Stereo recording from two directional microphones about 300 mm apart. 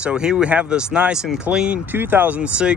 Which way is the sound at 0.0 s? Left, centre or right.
Centre.